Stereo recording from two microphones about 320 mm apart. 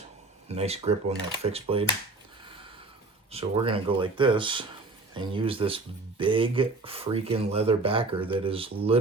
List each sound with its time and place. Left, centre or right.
0.4 s speech: centre
3.3 s speech: centre